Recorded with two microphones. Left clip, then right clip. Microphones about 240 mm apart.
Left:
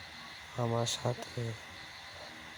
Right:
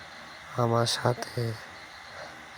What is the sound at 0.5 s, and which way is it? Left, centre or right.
Speech, right.